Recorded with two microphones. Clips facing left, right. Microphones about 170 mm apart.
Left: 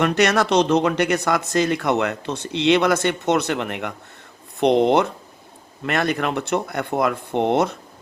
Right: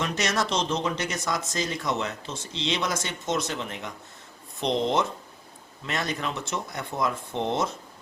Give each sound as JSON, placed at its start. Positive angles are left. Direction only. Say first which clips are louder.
{"t": 0.0, "sound": "speech", "louder": "left 9 dB", "side_deg": 65}